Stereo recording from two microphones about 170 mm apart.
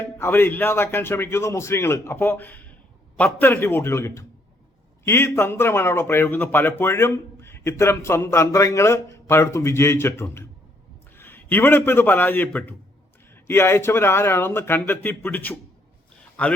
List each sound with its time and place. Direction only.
0.2 s a man's voice: 15° left (ahead or behind)